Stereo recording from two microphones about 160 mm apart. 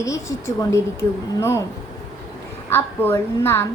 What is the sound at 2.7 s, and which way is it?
Speech, 15° left (ahead or behind).